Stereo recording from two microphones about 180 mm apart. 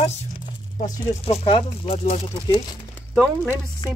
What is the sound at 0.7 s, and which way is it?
Speech, 45° left (ahead or behind).